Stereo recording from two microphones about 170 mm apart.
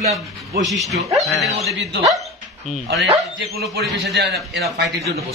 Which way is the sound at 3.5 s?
70° right (ahead or behind).